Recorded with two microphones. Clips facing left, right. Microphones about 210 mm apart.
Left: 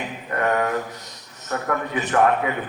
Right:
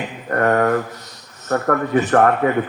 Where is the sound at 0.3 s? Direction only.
50° right (ahead or behind).